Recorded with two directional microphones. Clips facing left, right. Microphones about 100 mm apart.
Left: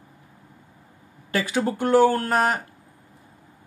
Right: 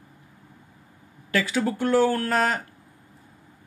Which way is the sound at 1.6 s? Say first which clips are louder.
Left 4 dB; 25° left (ahead or behind).